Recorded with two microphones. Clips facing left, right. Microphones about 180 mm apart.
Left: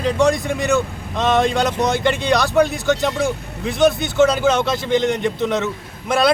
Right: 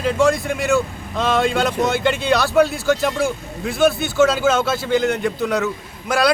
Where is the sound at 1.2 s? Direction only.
20° left (ahead or behind).